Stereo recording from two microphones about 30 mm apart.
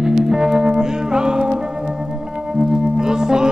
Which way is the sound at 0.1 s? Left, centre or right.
Right.